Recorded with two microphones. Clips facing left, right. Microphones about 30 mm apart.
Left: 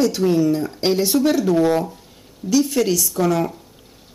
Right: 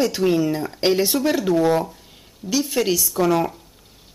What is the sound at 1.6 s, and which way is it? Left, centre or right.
Speech, centre.